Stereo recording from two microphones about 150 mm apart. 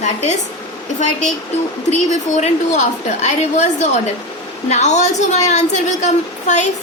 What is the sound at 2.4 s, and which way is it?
A woman's voice, 50° left (ahead or behind).